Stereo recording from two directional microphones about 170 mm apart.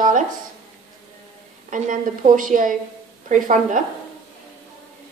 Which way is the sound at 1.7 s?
50° right (ahead or behind).